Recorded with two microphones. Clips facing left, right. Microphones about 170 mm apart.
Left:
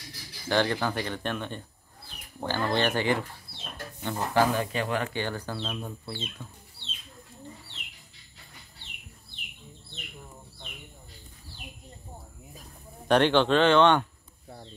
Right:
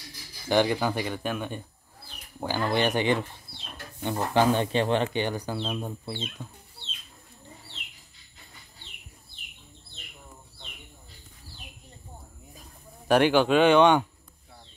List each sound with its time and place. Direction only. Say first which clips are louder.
0.5 s speech: right 3 dB; 15° right (ahead or behind)
13.1 s speech: right 1 dB; 10° right (ahead or behind)